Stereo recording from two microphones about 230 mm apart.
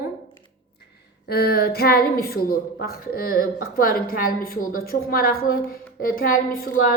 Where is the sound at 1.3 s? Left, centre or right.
Left.